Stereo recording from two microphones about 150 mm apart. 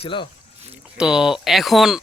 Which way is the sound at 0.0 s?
35° left (ahead or behind).